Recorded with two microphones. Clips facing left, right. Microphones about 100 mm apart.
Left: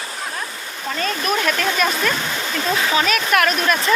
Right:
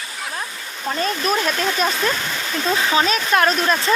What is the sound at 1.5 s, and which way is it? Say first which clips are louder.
Speech: left 1 dB; 25° right (ahead or behind).